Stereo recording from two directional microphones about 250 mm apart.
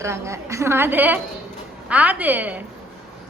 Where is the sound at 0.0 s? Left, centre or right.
Centre.